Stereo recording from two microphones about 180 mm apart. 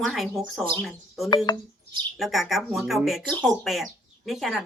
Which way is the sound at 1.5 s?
25° left (ahead or behind).